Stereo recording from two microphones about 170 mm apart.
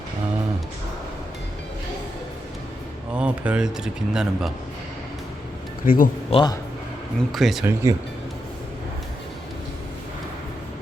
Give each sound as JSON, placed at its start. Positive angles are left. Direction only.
{"t": 3.2, "sound": "speech", "side_deg": -5}
{"t": 5.8, "sound": "speech", "side_deg": 55}
{"t": 6.3, "sound": "a man's voice", "side_deg": 25}
{"t": 7.3, "sound": "speech", "side_deg": 0}
{"t": 7.6, "sound": "speech", "side_deg": -15}